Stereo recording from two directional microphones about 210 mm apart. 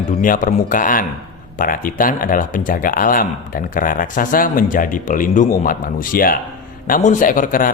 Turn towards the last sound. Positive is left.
turn(degrees=40)  # may be behind; listen again after turning